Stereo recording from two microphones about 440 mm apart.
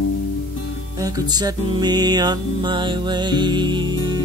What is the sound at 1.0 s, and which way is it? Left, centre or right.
Music, centre.